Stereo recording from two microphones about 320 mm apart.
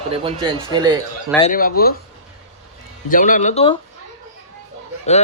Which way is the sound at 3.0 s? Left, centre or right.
Left.